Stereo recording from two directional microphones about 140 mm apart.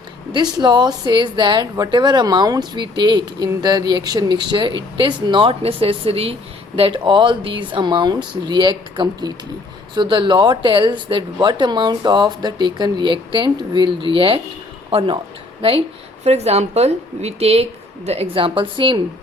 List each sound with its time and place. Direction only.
0.3 s speech: 35° right (ahead or behind)
16.2 s speech: 50° right (ahead or behind)